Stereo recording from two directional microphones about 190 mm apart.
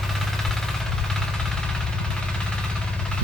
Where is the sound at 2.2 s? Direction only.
5° left (ahead or behind).